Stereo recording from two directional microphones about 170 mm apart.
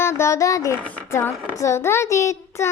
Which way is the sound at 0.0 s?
15° left (ahead or behind).